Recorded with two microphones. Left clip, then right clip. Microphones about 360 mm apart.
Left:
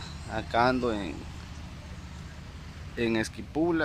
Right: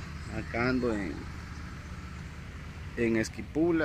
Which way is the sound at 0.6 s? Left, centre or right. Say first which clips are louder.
Left 5 dB; centre.